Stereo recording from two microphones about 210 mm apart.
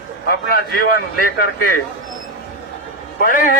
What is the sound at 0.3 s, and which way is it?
A man's voice, 45° left (ahead or behind).